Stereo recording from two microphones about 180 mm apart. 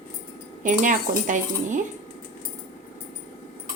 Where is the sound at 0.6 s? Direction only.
45° right (ahead or behind).